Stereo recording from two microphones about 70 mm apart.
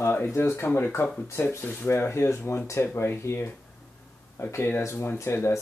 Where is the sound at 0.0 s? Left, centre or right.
Left.